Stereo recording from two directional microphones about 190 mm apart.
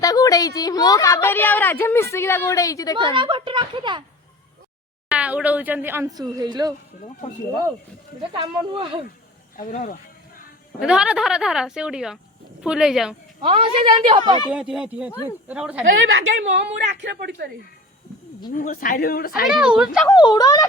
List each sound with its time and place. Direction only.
0.0 s a woman's voice: 20° left (ahead or behind)
3.1 s a woman's voice: 25° right (ahead or behind)
5.0 s a woman's voice: 5° right (ahead or behind)
8.3 s a woman's voice: 25° right (ahead or behind)
9.6 s a sound: 45° left (ahead or behind)
10.8 s speech: 5° right (ahead or behind)
13.4 s a woman's voice: 30° right (ahead or behind)
14.5 s speech: 5° right (ahead or behind)
16.2 s a woman's voice: 70° right (ahead or behind)
18.5 s speech: 45° left (ahead or behind)
19.5 s speech: 5° right (ahead or behind)
20.1 s speech: 20° left (ahead or behind)